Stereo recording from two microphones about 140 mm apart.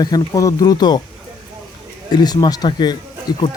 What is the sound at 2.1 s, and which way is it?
Speech, 30° left (ahead or behind).